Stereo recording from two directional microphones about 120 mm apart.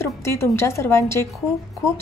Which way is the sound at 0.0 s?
20° left (ahead or behind).